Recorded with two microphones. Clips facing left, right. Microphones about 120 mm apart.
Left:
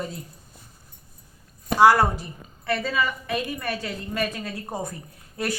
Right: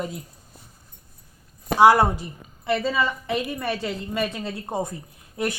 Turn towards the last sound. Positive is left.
turn(degrees=-20)  # may be behind; listen again after turning